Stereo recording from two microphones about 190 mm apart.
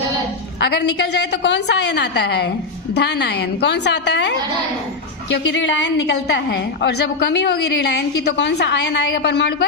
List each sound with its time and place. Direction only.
0.6 s a woman's voice: 60° left (ahead or behind)